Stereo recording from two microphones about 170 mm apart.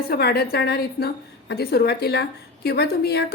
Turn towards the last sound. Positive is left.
turn(degrees=70)  # may be behind; listen again after turning